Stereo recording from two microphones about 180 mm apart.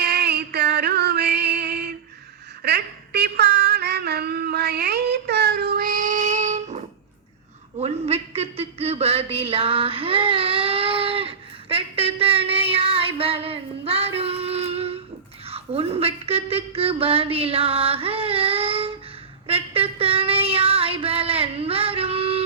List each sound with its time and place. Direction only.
0.0 s music: 65° right (ahead or behind)
2.6 s a sound: 65° right (ahead or behind); by 14.9 s 35° right (ahead or behind)
15.4 s a woman's voice: 35° right (ahead or behind)
19.5 s female singing: 30° right (ahead or behind)